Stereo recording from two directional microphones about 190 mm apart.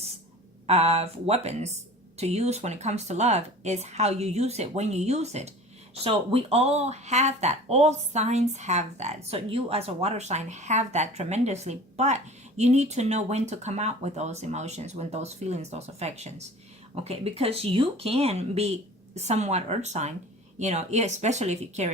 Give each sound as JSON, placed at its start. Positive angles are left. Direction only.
{"t": 0.7, "sound": "a woman's voice", "side_deg": -35}